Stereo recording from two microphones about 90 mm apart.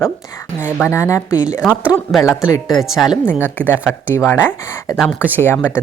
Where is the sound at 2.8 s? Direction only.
5° right (ahead or behind).